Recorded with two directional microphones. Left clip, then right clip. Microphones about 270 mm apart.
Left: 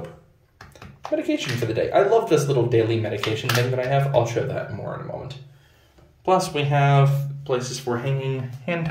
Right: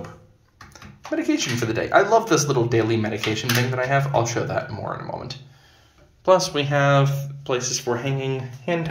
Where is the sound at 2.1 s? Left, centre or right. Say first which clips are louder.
Right 1 dB; centre.